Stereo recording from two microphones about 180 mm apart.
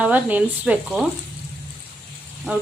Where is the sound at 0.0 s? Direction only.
10° right (ahead or behind).